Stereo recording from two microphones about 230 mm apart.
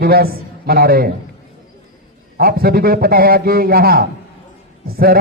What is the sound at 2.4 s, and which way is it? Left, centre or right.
A man's voice, right.